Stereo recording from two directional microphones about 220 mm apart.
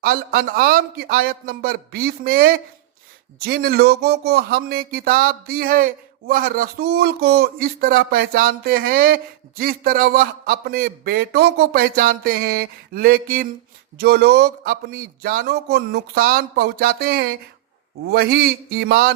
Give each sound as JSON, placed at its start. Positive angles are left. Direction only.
{"t": 0.0, "sound": "speech", "side_deg": -40}